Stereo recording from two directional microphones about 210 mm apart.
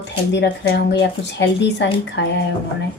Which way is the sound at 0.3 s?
55° left (ahead or behind).